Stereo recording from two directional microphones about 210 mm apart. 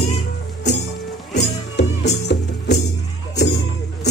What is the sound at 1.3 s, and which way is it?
Music, 55° left (ahead or behind).